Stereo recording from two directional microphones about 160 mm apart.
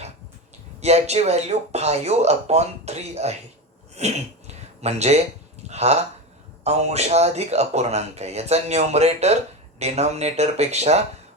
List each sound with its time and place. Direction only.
0.8 s speech: 45° right (ahead or behind)
3.9 s a sound: 45° right (ahead or behind)
5.6 s speech: 45° right (ahead or behind)